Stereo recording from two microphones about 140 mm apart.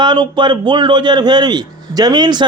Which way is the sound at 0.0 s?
30° right (ahead or behind).